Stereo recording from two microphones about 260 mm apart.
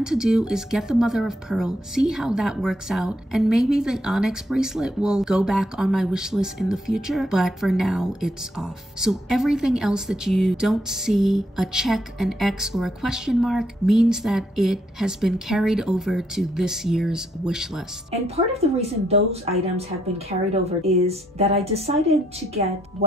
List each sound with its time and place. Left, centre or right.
0.0 s speech: centre
18.2 s a woman's voice: right
23.0 s a woman's voice: right